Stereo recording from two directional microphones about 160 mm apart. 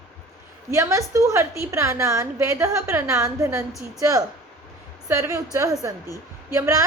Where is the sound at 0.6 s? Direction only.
15° right (ahead or behind).